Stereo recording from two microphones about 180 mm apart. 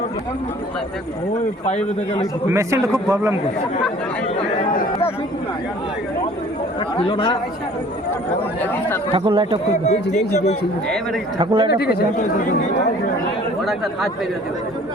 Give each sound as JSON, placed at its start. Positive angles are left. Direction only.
{"t": 1.6, "sound": "a man's voice", "side_deg": 40}
{"t": 2.5, "sound": "a man's voice", "side_deg": -15}
{"t": 6.9, "sound": "speech", "side_deg": 30}
{"t": 9.1, "sound": "speech", "side_deg": -30}
{"t": 9.8, "sound": "a man's voice", "side_deg": 40}
{"t": 10.8, "sound": "speech", "side_deg": 5}
{"t": 11.3, "sound": "speech", "side_deg": -25}
{"t": 11.7, "sound": "speech", "side_deg": 60}
{"t": 12.1, "sound": "speech", "side_deg": 45}
{"t": 13.6, "sound": "speech", "side_deg": 0}